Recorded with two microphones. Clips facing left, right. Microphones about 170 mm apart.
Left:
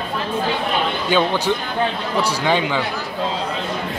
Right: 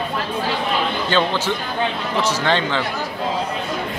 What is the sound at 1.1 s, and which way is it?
A man's voice, 10° left (ahead or behind).